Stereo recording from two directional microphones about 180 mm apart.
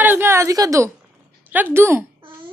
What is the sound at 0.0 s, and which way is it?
A woman's voice, 10° right (ahead or behind).